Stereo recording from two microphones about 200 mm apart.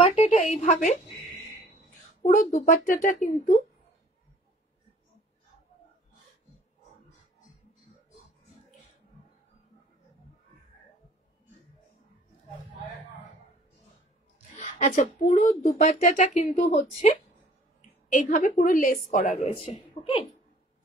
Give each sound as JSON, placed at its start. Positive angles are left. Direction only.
{"t": 0.0, "sound": "speech", "side_deg": 30}
{"t": 2.2, "sound": "speech", "side_deg": 40}
{"t": 14.6, "sound": "a woman's voice", "side_deg": 40}
{"t": 18.1, "sound": "speech", "side_deg": 40}
{"t": 19.4, "sound": "a woman's voice", "side_deg": 25}